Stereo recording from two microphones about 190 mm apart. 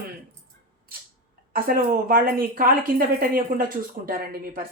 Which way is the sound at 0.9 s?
50° right (ahead or behind).